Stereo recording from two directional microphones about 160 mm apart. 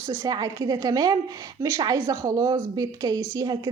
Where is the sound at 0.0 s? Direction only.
20° right (ahead or behind).